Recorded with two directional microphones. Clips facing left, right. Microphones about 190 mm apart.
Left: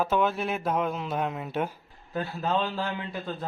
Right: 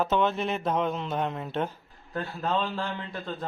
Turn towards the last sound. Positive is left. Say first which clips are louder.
# left 1 dB
turn(degrees=5)  # may be behind; listen again after turning